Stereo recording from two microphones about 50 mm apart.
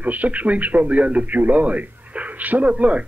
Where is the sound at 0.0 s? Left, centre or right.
Right.